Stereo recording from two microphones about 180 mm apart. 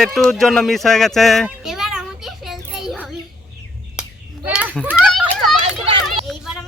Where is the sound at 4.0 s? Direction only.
5° right (ahead or behind).